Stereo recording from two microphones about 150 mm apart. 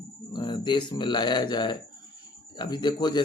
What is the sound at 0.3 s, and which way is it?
Speech, 30° left (ahead or behind).